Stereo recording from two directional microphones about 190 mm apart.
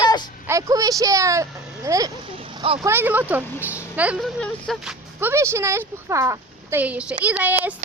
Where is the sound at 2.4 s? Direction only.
25° right (ahead or behind).